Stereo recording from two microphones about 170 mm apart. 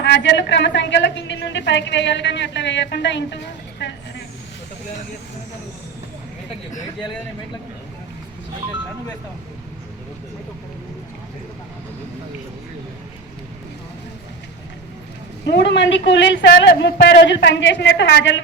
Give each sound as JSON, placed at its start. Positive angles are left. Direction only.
{"t": 0.0, "sound": "a woman's voice", "side_deg": 90}
{"t": 15.4, "sound": "a woman's voice", "side_deg": 85}